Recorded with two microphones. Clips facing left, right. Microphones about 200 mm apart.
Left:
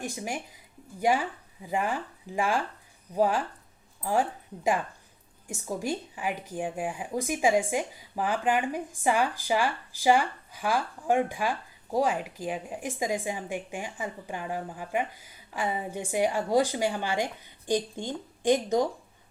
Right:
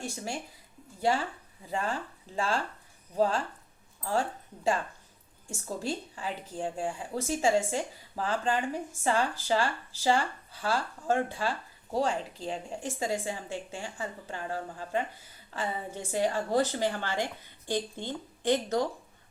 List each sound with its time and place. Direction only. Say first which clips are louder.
0.0 s speech: left 2 dB; 15° left (ahead or behind)